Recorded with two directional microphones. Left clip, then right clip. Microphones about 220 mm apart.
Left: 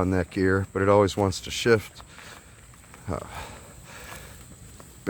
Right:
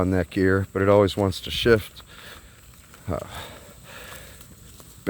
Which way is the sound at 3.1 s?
15° right (ahead or behind).